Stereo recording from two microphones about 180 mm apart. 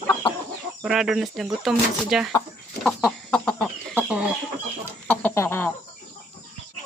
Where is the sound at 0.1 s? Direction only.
20° left (ahead or behind).